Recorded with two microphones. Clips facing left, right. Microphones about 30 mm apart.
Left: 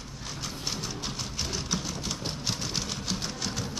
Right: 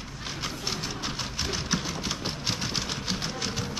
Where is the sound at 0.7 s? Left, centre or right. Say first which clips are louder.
Right 1 dB; right.